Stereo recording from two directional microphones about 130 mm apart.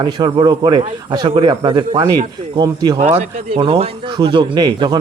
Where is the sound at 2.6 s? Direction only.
30° right (ahead or behind).